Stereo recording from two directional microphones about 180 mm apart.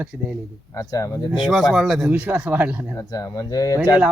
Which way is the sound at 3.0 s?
20° left (ahead or behind).